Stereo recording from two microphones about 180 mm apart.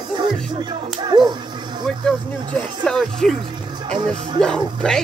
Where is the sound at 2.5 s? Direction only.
5° left (ahead or behind).